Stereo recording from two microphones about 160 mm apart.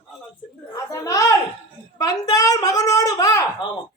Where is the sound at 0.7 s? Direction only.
20° left (ahead or behind).